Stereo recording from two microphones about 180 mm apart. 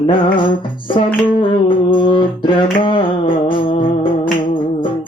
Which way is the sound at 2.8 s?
30° left (ahead or behind).